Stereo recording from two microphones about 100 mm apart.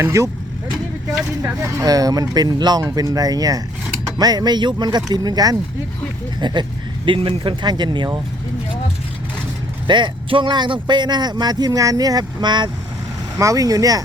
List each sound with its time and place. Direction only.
0.0 s speech: 30° right (ahead or behind)
1.6 s speech: 35° right (ahead or behind)
9.8 s speech: 50° right (ahead or behind)
13.4 s speech: 35° right (ahead or behind)